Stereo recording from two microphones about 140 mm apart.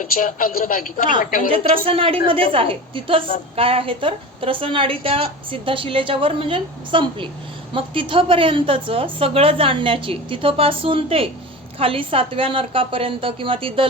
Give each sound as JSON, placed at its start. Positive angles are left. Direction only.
{"t": 0.0, "sound": "a woman's voice", "side_deg": 75}
{"t": 1.5, "sound": "a woman's voice", "side_deg": -40}